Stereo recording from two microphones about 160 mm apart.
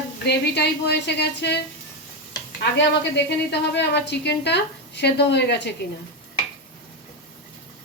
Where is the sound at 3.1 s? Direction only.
90° left.